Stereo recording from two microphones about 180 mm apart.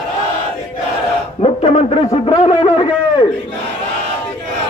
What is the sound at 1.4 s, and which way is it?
A man's voice, 35° left (ahead or behind).